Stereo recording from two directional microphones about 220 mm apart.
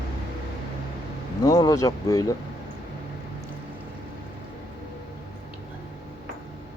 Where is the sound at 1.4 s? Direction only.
15° left (ahead or behind).